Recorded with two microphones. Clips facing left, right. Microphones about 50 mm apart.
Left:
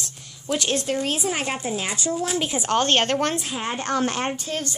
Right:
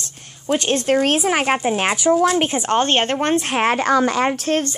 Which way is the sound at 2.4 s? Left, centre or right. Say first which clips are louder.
Right 6 dB; right.